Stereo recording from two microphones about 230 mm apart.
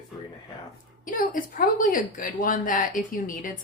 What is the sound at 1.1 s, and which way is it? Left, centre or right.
Speech, left.